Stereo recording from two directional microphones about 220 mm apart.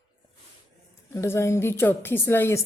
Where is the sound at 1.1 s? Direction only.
10° left (ahead or behind).